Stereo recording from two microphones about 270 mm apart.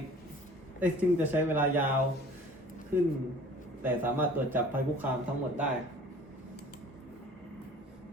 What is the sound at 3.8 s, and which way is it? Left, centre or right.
A man's voice, centre.